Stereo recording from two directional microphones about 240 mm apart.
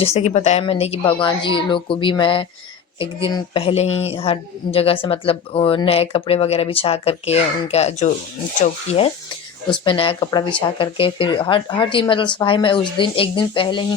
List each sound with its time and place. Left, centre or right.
0.0 s speech: left